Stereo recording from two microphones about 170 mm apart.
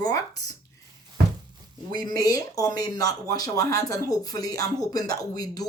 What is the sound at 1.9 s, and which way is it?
Speech, 25° left (ahead or behind).